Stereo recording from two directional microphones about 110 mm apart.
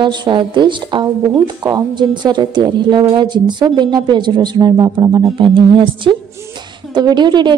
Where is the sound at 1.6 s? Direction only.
35° right (ahead or behind).